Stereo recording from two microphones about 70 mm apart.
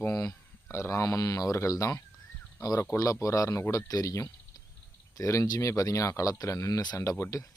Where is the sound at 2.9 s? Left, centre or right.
Left.